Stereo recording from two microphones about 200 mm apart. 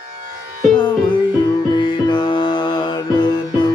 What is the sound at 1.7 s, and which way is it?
Music, 20° left (ahead or behind).